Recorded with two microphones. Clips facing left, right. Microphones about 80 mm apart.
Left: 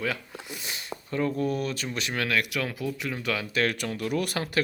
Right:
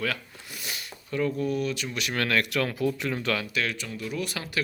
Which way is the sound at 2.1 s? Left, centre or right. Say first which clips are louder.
Right 2 dB; centre.